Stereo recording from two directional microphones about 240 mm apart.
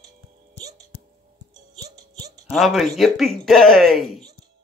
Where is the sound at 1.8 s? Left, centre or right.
Centre.